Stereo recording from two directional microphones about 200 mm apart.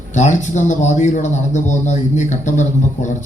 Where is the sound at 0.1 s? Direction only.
35° left (ahead or behind).